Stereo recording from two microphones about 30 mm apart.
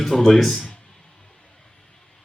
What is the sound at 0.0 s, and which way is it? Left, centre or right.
Speech, centre.